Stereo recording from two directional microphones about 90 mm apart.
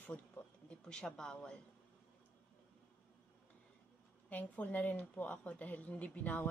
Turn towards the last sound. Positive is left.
turn(degrees=15)  # may be behind; listen again after turning